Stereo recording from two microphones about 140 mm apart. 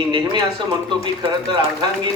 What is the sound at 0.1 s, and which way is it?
Speech, 30° right (ahead or behind).